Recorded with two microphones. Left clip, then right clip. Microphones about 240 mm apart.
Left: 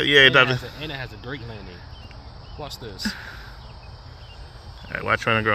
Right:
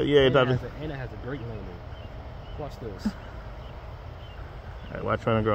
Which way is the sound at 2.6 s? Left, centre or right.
Centre.